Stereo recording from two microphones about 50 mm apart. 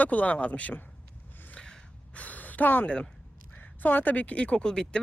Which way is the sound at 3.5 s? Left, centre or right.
Left.